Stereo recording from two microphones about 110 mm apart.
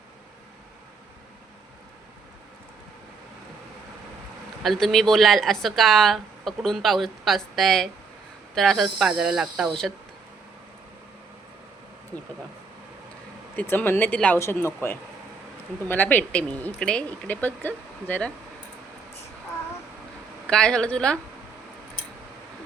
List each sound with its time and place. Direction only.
4.6 s speech: centre (ahead or behind)
13.6 s speech: 20° left (ahead or behind)
14.3 s speech: 25° left (ahead or behind)
20.5 s speech: 10° left (ahead or behind)